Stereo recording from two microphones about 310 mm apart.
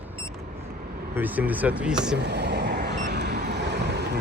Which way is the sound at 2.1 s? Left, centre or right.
Right.